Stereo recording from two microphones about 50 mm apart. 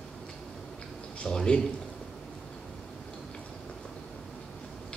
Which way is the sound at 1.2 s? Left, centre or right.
Centre.